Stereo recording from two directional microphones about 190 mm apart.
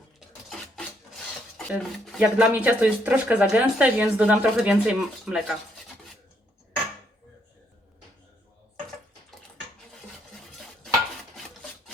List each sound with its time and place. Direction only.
1.5 s speech: 5° right (ahead or behind)